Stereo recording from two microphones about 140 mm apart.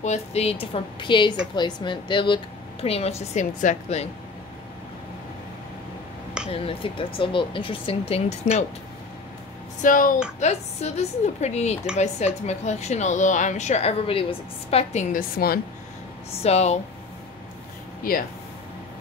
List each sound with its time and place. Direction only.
0.0 s a woman's voice: 50° left (ahead or behind)
6.5 s speech: 40° left (ahead or behind)
9.8 s speech: 75° left (ahead or behind)
10.4 s a woman's voice: 50° left (ahead or behind)
15.1 s a woman's voice: 90° left
16.3 s a woman's voice: 50° left (ahead or behind)
18.1 s a woman's voice: 90° left